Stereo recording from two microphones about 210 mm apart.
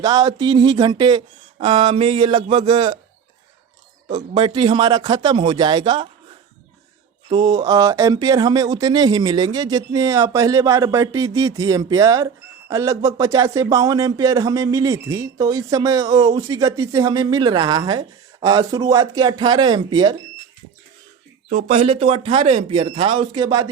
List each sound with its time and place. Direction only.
0.0 s speech: 20° right (ahead or behind)
4.1 s speech: 25° right (ahead or behind)
7.3 s speech: 20° right (ahead or behind)
21.5 s speech: 30° right (ahead or behind)